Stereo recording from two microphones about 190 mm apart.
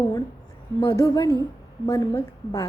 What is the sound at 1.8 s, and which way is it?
Speech, 20° left (ahead or behind).